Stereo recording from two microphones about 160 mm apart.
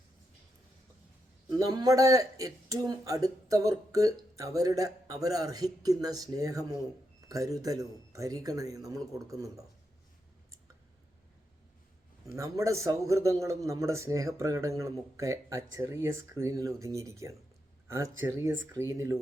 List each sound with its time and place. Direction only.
1.5 s a man's voice: 25° right (ahead or behind)
12.2 s a man's voice: 20° right (ahead or behind)